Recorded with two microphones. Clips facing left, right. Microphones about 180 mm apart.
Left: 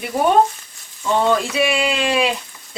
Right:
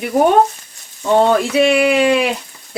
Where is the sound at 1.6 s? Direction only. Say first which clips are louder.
Right 7 dB; 55° right (ahead or behind).